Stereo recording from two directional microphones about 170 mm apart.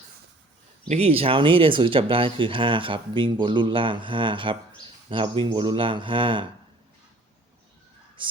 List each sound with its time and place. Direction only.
0.9 s speech: 35° right (ahead or behind)